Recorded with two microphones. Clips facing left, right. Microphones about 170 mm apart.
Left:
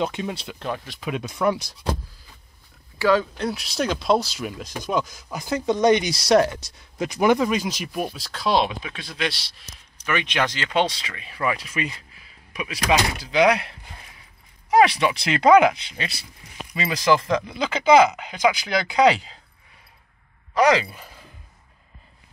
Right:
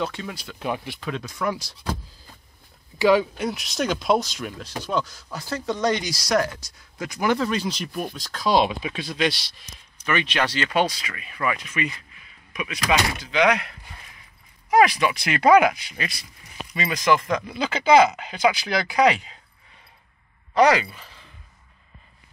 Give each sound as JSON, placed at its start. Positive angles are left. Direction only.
{"t": 0.0, "sound": "speech", "side_deg": 20}
{"t": 0.6, "sound": "speech", "side_deg": -10}
{"t": 1.0, "sound": "speech", "side_deg": 15}
{"t": 1.3, "sound": "speech", "side_deg": 25}
{"t": 3.0, "sound": "speech", "side_deg": -15}
{"t": 3.4, "sound": "speech", "side_deg": 0}
{"t": 10.1, "sound": "speech", "side_deg": 20}
{"t": 17.6, "sound": "speech", "side_deg": 15}
{"t": 20.9, "sound": "a sound", "side_deg": 45}